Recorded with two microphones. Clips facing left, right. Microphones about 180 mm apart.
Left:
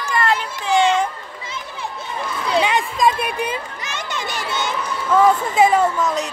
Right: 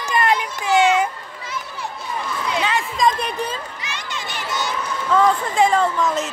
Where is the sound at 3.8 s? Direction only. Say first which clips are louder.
Left 3 dB; 45° left (ahead or behind).